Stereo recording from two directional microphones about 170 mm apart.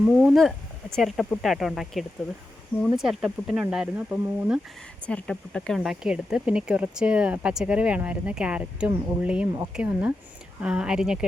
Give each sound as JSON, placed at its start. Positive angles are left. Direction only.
{"t": 0.0, "sound": "speech", "side_deg": -5}
{"t": 5.0, "sound": "speech", "side_deg": 5}